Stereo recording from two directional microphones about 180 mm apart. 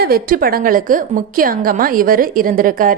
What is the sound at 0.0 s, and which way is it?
A woman's voice, 55° right (ahead or behind).